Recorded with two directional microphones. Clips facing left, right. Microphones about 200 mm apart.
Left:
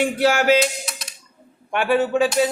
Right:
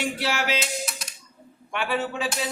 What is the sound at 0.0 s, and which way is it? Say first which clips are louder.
Speech: left 9 dB; 50° left (ahead or behind).